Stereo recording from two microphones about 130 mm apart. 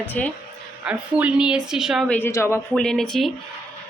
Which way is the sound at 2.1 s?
20° left (ahead or behind).